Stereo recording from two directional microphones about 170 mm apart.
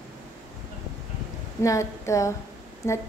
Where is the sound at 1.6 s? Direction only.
20° left (ahead or behind).